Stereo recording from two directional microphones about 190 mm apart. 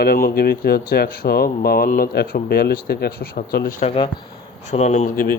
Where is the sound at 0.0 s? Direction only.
55° left (ahead or behind).